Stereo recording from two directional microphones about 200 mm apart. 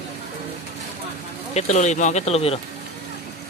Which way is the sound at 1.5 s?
35° left (ahead or behind).